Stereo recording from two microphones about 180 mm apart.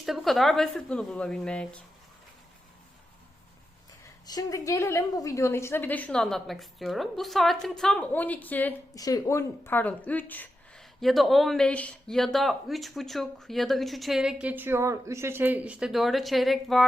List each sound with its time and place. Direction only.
0.0 s speech: centre (ahead or behind)
4.3 s a woman's voice: 20° left (ahead or behind)
9.0 s speech: 20° left (ahead or behind); by 16.8 s centre (ahead or behind)